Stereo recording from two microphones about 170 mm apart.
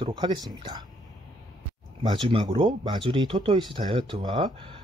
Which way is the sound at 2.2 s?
30° right (ahead or behind).